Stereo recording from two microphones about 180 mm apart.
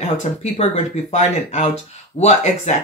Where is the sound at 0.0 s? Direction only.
40° left (ahead or behind).